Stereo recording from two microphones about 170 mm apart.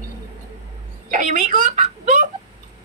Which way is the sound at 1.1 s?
50° right (ahead or behind).